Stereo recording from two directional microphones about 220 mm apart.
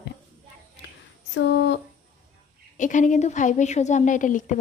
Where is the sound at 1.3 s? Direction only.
55° left (ahead or behind).